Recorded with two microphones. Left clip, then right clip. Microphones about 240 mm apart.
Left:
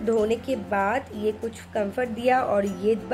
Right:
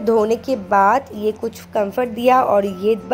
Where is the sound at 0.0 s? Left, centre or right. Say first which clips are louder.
Right 7 dB; centre.